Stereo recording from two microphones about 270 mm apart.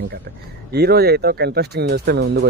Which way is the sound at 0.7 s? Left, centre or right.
Right.